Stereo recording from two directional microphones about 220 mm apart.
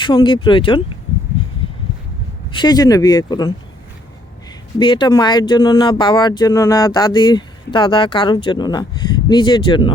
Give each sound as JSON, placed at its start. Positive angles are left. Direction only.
{"t": 0.0, "sound": "speech", "side_deg": 20}
{"t": 2.5, "sound": "speech", "side_deg": 20}
{"t": 4.8, "sound": "speech", "side_deg": 20}